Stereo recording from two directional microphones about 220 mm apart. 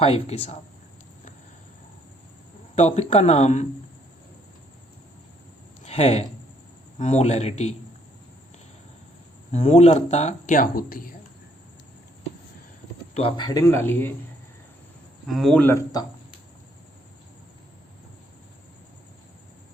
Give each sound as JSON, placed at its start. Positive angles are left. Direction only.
{"t": 0.0, "sound": "speech", "side_deg": 25}
{"t": 2.7, "sound": "speech", "side_deg": 30}
{"t": 5.8, "sound": "speech", "side_deg": 30}
{"t": 9.5, "sound": "speech", "side_deg": 30}
{"t": 13.1, "sound": "speech", "side_deg": 20}
{"t": 15.3, "sound": "speech", "side_deg": 0}